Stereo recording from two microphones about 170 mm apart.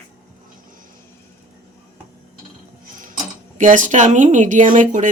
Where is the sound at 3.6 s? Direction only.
50° right (ahead or behind).